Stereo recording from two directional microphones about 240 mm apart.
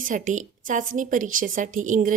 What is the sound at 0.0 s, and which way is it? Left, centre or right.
A woman's voice, right.